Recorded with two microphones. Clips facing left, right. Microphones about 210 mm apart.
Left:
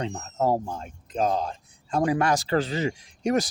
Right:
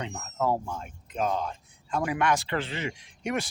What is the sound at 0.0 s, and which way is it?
Speech, 30° left (ahead or behind).